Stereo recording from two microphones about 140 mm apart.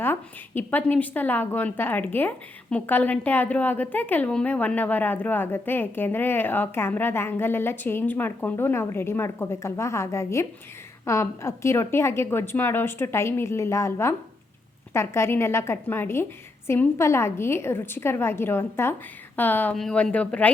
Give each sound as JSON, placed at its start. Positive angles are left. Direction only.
{"t": 0.0, "sound": "a woman's voice", "side_deg": 15}